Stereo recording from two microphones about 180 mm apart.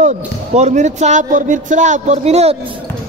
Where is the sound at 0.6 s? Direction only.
40° right (ahead or behind).